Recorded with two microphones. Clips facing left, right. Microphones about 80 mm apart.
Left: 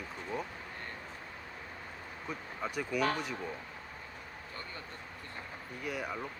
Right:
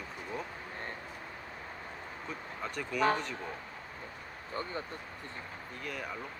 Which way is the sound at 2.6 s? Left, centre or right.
Centre.